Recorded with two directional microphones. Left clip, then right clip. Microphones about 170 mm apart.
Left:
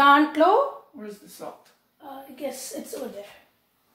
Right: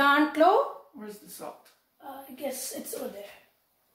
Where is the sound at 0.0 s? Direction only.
25° left (ahead or behind).